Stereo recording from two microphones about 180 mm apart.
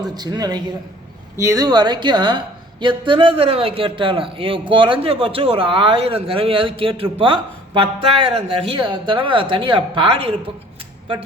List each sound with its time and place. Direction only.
0.1 s a man's voice: 20° right (ahead or behind)